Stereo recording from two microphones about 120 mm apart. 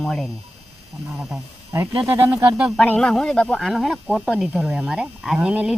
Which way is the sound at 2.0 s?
20° right (ahead or behind).